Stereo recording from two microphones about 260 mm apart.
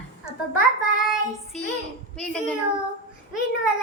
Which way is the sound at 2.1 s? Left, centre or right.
Centre.